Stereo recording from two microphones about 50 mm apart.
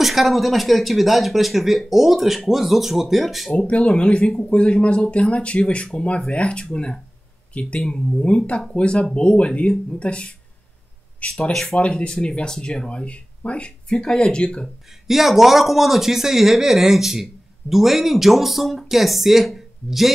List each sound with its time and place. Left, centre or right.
0.0 s speech: centre
3.5 s speech: left
11.6 s speech: centre
14.9 s speech: centre